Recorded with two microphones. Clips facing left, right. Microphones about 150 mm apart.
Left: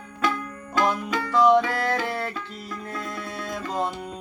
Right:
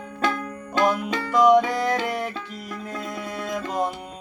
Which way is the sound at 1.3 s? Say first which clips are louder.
Right 2 dB; 15° right (ahead or behind).